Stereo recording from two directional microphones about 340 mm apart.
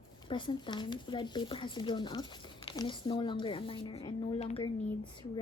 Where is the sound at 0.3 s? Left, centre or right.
Centre.